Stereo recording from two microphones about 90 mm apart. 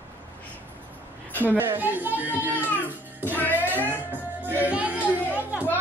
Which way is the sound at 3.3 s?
20° left (ahead or behind).